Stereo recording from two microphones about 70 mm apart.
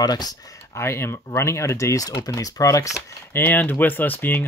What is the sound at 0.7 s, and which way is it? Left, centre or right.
Speech, left.